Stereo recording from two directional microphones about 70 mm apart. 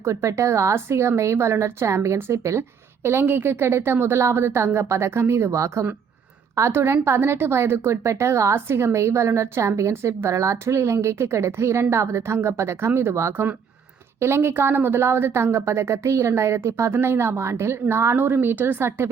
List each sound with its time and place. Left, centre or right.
0.0 s a woman's voice: right